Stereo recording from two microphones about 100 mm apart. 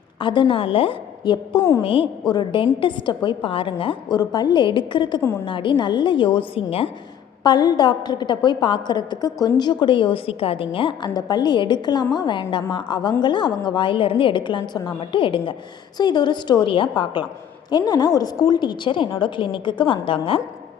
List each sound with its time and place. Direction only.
0.2 s a woman's voice: 55° left (ahead or behind)
1.8 s a woman's voice: 65° left (ahead or behind)
2.3 s a woman's voice: 50° left (ahead or behind)
4.1 s a woman's voice: 40° left (ahead or behind); by 6.9 s 70° left (ahead or behind)
7.4 s a woman's voice: 45° left (ahead or behind)
11.1 s a woman's voice: 45° left (ahead or behind)
17.7 s a woman's voice: 45° left (ahead or behind); by 20.4 s 65° left (ahead or behind)